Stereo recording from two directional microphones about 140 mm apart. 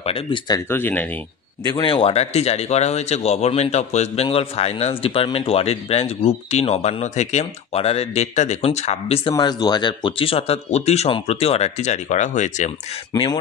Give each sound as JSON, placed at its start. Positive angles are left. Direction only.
{"t": 0.0, "sound": "speech", "side_deg": 40}
{"t": 0.7, "sound": "speech", "side_deg": 15}
{"t": 1.6, "sound": "speech", "side_deg": 30}
{"t": 9.3, "sound": "speech", "side_deg": 30}